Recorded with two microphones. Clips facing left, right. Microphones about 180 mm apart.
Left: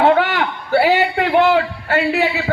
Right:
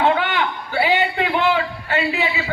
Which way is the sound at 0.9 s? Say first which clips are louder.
Left 4 dB; 45° left (ahead or behind).